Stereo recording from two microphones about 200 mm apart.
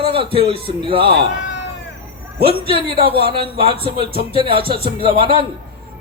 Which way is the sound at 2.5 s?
25° right (ahead or behind).